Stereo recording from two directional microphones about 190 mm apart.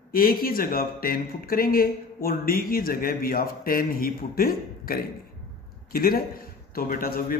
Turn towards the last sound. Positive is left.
turn(degrees=50)  # may be behind; listen again after turning